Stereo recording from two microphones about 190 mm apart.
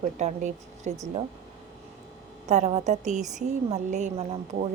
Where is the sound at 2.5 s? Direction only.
35° right (ahead or behind).